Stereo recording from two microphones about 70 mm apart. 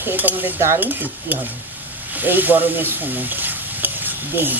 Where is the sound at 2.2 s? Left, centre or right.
Right.